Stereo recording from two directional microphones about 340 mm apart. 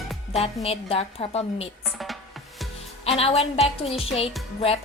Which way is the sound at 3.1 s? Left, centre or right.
Centre.